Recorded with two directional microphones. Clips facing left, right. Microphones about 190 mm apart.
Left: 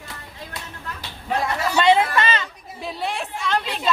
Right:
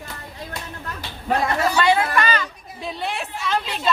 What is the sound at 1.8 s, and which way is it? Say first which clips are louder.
Chatter: left 4 dB; 20° left (ahead or behind).